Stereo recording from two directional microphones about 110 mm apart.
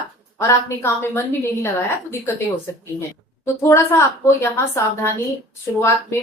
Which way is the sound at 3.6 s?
25° left (ahead or behind).